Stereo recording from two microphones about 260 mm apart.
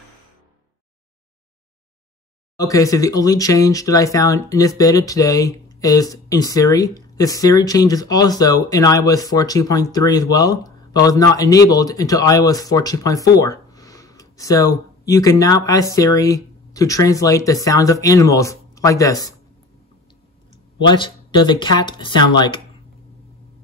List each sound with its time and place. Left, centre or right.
2.5 s speech: centre
20.8 s speech: centre